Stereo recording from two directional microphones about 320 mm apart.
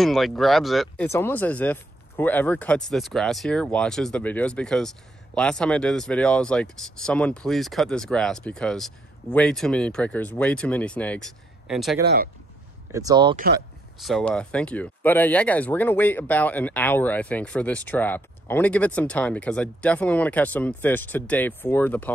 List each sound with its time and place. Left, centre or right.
0.0 s speech: centre
12.0 s speech: right
12.9 s speech: centre
14.0 s speech: centre